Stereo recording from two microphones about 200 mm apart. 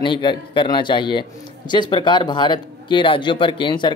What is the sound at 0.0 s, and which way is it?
A man's voice, 25° left (ahead or behind).